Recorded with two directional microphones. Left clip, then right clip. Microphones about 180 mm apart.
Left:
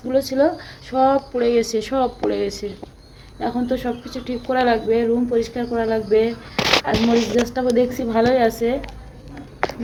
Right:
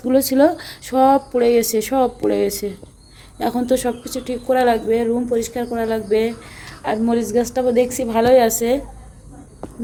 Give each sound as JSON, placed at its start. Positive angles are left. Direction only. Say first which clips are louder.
{"t": 0.1, "sound": "speech", "louder": "right 3 dB", "side_deg": -65}
{"t": 3.3, "sound": "speech", "louder": "right 4 dB", "side_deg": -75}
{"t": 6.8, "sound": "a woman's voice", "louder": "left 1 dB", "side_deg": -35}